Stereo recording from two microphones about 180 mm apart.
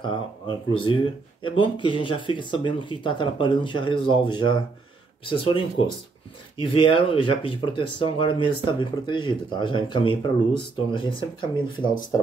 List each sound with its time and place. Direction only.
0.0 s speech: 25° left (ahead or behind)